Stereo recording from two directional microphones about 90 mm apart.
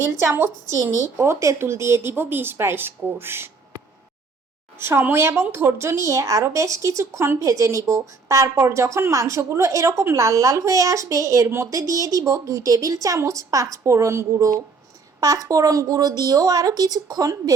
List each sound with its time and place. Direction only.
0.2 s speech: 30° right (ahead or behind)
4.8 s a woman's voice: 25° right (ahead or behind); by 17.5 s 45° right (ahead or behind)